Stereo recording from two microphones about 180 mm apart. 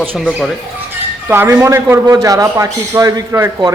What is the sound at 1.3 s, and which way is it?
A man's voice, 15° right (ahead or behind).